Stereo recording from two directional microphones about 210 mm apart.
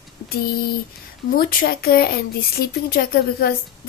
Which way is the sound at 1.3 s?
45° left (ahead or behind).